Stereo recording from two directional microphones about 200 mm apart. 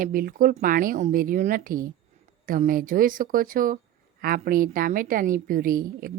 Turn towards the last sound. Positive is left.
turn(degrees=-45)  # may be behind; listen again after turning